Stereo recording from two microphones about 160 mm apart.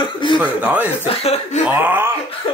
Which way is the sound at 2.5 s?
35° left (ahead or behind).